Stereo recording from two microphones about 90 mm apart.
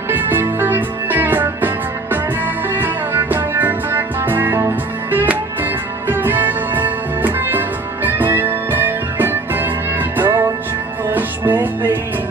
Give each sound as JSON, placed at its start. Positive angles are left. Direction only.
{"t": 0.1, "sound": "music", "side_deg": -20}
{"t": 2.7, "sound": "music", "side_deg": -20}